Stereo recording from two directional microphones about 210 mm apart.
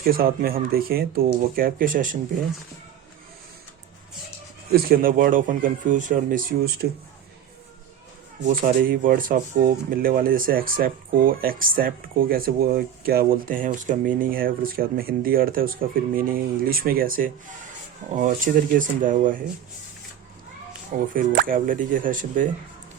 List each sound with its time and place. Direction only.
0.0 s speech: 45° right (ahead or behind)
4.7 s speech: 45° right (ahead or behind)
8.4 s speech: 40° right (ahead or behind)
21.1 s speech: 40° right (ahead or behind)